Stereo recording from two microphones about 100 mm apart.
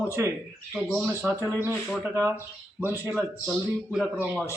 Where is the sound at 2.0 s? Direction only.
25° right (ahead or behind).